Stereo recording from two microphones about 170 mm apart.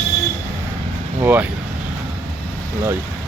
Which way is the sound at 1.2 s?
10° right (ahead or behind).